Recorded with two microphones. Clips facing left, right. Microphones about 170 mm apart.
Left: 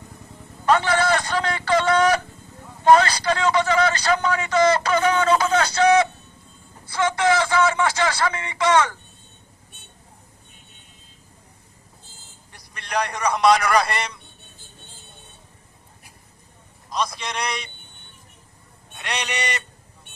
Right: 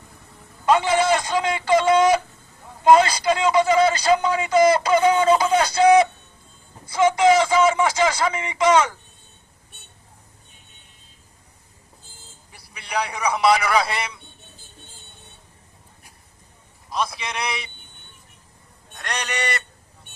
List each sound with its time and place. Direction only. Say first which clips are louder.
0.6 s a sound: right 1 dB; 10° right (ahead or behind)
0.9 s speech: right 1 dB; 20° right (ahead or behind)
6.9 s speech: right 4 dB; 10° right (ahead or behind)
12.9 s a man's voice: left 1 dB; 5° right (ahead or behind)
16.9 s a man's voice: even; 5° right (ahead or behind)
18.9 s a man's voice: even; 10° left (ahead or behind)